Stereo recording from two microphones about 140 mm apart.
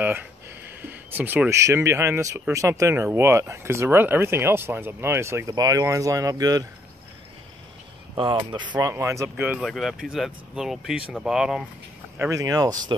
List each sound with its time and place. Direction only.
0.0 s a sound: 10° right (ahead or behind)
0.8 s speech: 15° right (ahead or behind)
8.2 s speech: 35° right (ahead or behind)
8.9 s speech: 20° right (ahead or behind)
9.6 s speech: centre (ahead or behind)
12.2 s speech: 25° right (ahead or behind)